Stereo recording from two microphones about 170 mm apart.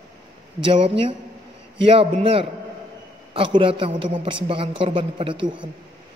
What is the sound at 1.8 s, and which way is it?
A man's voice, 35° right (ahead or behind).